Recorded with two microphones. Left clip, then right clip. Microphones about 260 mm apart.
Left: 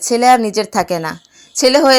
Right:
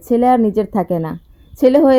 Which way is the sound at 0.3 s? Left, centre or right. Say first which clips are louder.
Left 6 dB; left.